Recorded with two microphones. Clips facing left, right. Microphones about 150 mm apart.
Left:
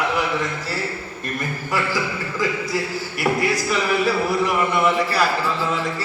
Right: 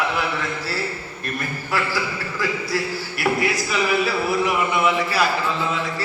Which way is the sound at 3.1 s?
Centre (ahead or behind).